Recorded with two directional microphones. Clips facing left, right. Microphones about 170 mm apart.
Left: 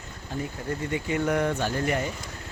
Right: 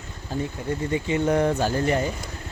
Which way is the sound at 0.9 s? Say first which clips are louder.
Right 4 dB; 30° right (ahead or behind).